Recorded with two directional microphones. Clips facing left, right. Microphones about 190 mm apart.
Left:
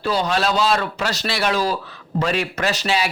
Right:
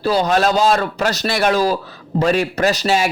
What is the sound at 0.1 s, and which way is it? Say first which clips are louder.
A man's voice: right 4 dB; 45° right (ahead or behind).